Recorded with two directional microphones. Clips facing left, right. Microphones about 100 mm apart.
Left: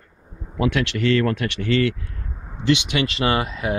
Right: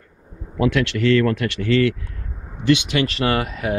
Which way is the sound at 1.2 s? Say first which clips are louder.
Right 2 dB; 10° left (ahead or behind).